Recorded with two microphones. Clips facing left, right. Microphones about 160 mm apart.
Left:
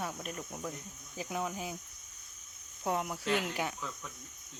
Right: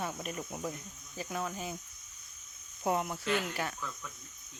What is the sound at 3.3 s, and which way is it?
Speech, 15° left (ahead or behind).